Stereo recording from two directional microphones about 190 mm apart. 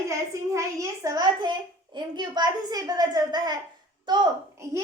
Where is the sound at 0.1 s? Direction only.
15° right (ahead or behind).